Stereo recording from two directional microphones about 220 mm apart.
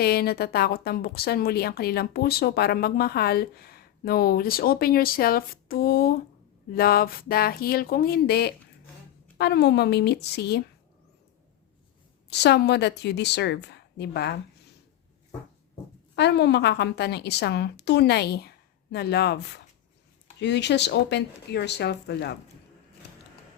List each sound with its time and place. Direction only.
0.0 s a woman's voice: 45° left (ahead or behind)
12.3 s a woman's voice: 50° left (ahead or behind)
16.1 s a woman's voice: 50° left (ahead or behind)